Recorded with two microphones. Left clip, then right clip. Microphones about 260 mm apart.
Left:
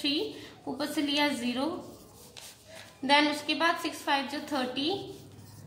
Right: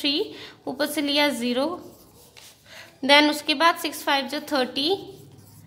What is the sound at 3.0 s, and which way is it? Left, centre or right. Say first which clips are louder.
A woman's voice: right 7 dB; right.